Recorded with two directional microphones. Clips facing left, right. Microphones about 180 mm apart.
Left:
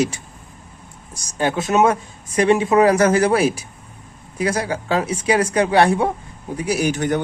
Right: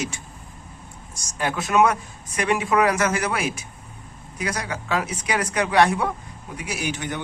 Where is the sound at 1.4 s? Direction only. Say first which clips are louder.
Left 3 dB; 25° left (ahead or behind).